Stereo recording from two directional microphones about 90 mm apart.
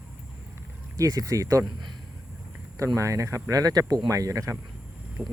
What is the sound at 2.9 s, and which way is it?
Speech, 40° right (ahead or behind).